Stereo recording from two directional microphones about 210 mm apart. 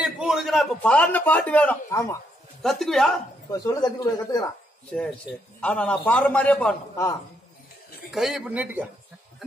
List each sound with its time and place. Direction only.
0.0 s a man's voice: centre (ahead or behind); by 2.1 s 15° left (ahead or behind)
2.6 s speech: centre (ahead or behind)
3.4 s a man's voice: 20° left (ahead or behind)
5.6 s a man's voice: 5° left (ahead or behind)
8.1 s speech: centre (ahead or behind)